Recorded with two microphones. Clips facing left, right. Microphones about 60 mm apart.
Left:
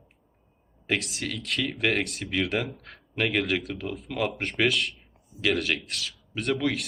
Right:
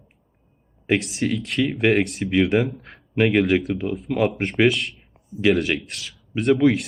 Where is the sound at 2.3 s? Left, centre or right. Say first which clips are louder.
Right 9 dB; centre.